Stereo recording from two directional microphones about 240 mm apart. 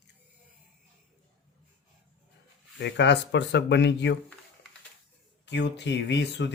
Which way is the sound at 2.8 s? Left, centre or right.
Left.